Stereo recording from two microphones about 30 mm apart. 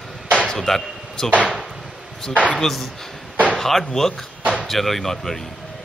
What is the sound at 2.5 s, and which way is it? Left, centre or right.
Speech, centre.